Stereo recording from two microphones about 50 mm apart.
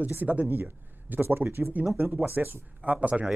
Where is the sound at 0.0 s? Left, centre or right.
Right.